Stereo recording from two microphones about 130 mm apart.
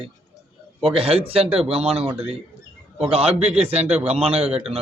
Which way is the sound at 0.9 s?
45° right (ahead or behind).